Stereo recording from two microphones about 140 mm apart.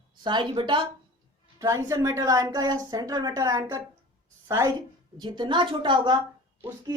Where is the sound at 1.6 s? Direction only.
20° right (ahead or behind).